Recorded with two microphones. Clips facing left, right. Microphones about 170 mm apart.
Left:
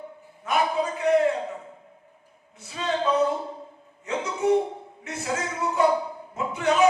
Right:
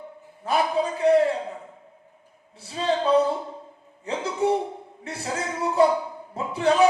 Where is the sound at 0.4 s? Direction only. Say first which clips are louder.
Right 1 dB; 35° right (ahead or behind).